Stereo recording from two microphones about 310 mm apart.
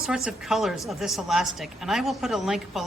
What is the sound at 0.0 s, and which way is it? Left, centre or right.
Speech, centre.